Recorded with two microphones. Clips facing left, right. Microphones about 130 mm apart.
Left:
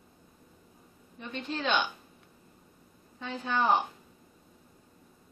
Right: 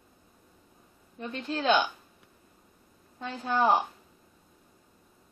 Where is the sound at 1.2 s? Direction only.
Centre (ahead or behind).